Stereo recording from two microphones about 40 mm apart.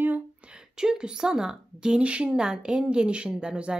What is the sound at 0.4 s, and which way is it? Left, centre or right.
A woman's voice, right.